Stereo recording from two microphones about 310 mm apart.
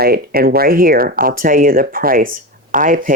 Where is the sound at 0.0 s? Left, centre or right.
Right.